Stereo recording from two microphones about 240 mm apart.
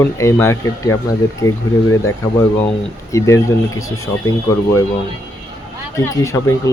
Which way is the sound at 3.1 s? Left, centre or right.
Centre.